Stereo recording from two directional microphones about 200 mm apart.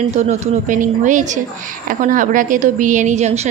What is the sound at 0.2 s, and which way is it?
A woman's voice, 40° right (ahead or behind).